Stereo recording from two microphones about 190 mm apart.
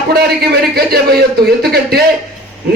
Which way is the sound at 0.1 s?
55° right (ahead or behind).